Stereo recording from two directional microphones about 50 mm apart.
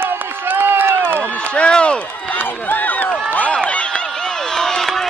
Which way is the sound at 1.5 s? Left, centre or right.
Left.